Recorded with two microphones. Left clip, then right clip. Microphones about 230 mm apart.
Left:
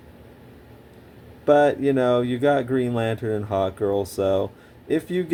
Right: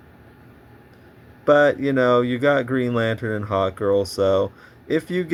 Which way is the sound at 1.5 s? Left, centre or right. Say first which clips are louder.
Right 1 dB; right.